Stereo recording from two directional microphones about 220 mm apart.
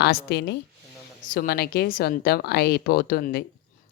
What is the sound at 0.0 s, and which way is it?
A woman's voice, 45° left (ahead or behind).